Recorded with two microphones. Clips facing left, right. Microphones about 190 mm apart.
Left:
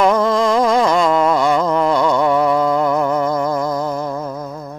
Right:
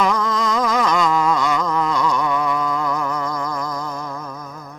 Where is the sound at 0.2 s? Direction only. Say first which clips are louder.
Left 6 dB; 30° left (ahead or behind).